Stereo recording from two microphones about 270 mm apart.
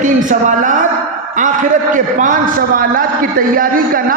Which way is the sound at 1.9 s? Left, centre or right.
Right.